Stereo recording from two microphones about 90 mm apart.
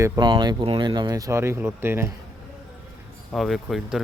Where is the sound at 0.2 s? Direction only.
55° right (ahead or behind).